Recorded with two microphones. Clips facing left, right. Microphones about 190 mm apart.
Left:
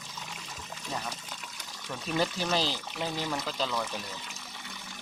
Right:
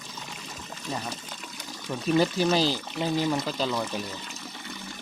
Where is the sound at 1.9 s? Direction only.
5° right (ahead or behind).